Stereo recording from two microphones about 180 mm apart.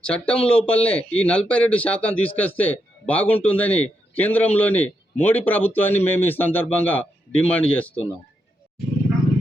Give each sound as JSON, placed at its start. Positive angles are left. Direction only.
{"t": 0.0, "sound": "a man's voice", "side_deg": 5}